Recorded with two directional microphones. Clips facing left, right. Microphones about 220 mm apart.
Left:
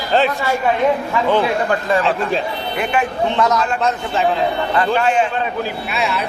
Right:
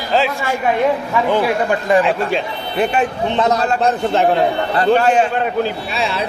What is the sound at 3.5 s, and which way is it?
Speech, 35° right (ahead or behind).